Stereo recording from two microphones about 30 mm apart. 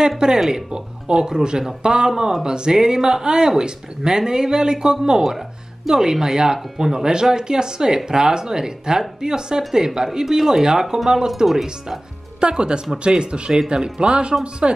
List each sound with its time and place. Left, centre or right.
0.2 s speech: right; by 10.6 s centre
10.6 s speech: right
12.4 s speech: right